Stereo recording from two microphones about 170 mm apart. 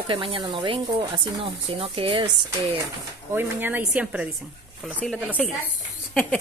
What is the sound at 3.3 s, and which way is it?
A woman's voice, 10° right (ahead or behind).